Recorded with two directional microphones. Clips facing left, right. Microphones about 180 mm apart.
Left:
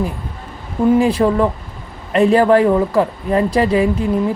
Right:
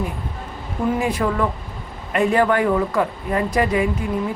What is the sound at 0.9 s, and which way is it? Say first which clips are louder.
Speech: left 7 dB; 30° left (ahead or behind).